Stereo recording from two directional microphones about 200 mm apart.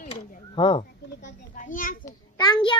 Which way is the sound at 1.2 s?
40° left (ahead or behind).